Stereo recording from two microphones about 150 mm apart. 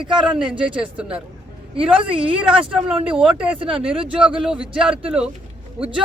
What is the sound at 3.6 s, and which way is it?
Speech, 35° right (ahead or behind).